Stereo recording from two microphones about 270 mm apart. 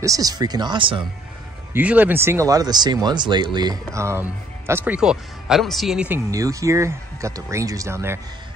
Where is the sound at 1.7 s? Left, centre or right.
Centre.